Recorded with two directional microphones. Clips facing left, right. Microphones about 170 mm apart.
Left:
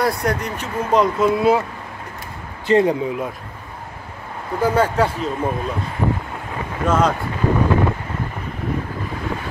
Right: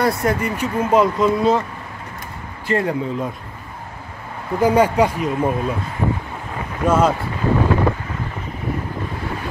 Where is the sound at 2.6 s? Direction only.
20° left (ahead or behind).